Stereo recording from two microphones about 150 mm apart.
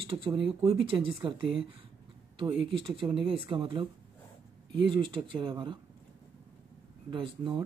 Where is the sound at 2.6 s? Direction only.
35° right (ahead or behind).